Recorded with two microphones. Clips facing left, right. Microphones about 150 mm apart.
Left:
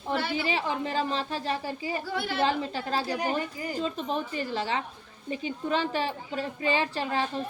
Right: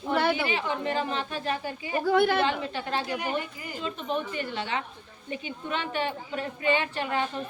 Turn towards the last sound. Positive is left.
turn(degrees=35)  # may be behind; listen again after turning